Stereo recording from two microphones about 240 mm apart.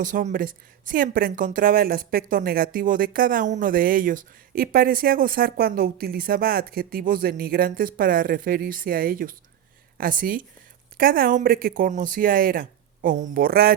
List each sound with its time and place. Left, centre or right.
0.0 s speech: right